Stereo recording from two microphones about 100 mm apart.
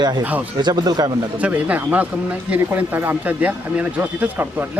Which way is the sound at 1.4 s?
15° right (ahead or behind).